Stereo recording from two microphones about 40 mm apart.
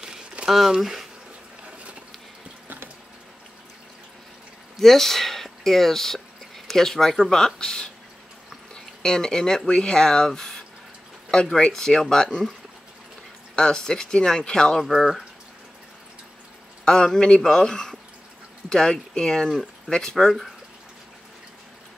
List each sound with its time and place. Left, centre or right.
0.7 s speech: centre
4.7 s speech: centre
13.6 s speech: centre
15.0 s speech: centre
16.8 s speech: centre